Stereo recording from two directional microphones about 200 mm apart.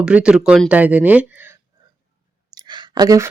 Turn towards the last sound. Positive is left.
turn(degrees=-20)  # may be behind; listen again after turning